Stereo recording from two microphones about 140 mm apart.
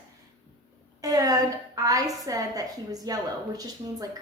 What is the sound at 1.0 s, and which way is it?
A woman's voice, 25° right (ahead or behind).